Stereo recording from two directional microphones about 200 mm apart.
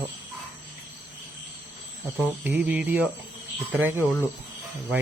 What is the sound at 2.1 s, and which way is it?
Speech, 10° right (ahead or behind).